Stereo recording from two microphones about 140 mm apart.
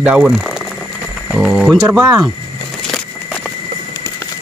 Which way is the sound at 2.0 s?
25° right (ahead or behind).